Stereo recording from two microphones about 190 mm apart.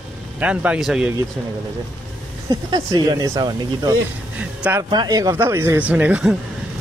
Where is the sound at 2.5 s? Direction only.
20° right (ahead or behind); by 6.4 s 5° right (ahead or behind).